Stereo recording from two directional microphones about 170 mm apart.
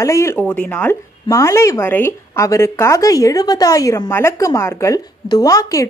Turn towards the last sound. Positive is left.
turn(degrees=20)  # may be behind; listen again after turning